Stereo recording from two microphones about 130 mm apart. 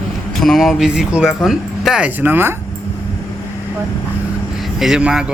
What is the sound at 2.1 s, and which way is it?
Speech, 15° right (ahead or behind).